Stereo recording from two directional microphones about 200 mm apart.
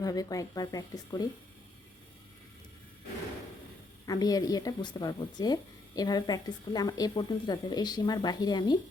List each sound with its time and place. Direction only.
0.0 s a woman's voice: 20° left (ahead or behind)
4.0 s a woman's voice: 20° left (ahead or behind)